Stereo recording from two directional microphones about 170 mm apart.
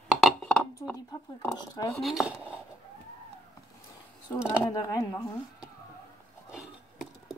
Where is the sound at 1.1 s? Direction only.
20° left (ahead or behind).